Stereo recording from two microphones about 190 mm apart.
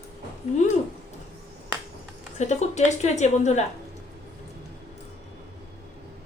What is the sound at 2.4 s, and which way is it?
A woman's voice, 35° left (ahead or behind).